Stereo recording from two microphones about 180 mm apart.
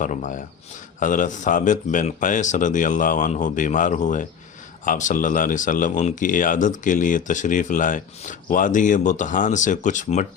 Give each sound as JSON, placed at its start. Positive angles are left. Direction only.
{"t": 0.0, "sound": "speech", "side_deg": 45}